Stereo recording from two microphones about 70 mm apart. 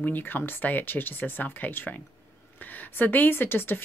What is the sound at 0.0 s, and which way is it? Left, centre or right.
Speech, left.